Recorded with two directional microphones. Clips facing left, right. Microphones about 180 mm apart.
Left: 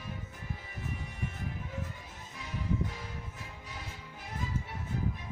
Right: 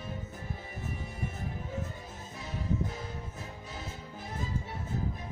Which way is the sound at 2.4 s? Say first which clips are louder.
Right 1 dB; 30° right (ahead or behind).